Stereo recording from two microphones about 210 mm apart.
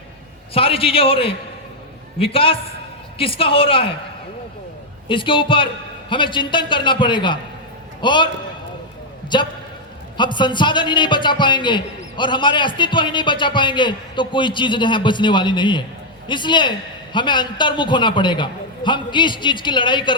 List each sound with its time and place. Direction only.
0.5 s a man's voice: 25° left (ahead or behind)
5.0 s a man's voice: 25° left (ahead or behind)
9.3 s a man's voice: 20° left (ahead or behind)